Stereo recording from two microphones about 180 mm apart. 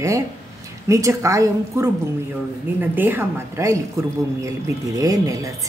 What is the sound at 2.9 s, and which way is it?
A woman's voice, 10° right (ahead or behind).